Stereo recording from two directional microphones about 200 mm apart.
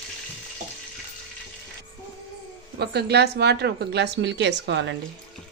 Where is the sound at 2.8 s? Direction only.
55° right (ahead or behind).